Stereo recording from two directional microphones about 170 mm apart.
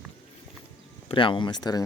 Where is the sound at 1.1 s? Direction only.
30° left (ahead or behind).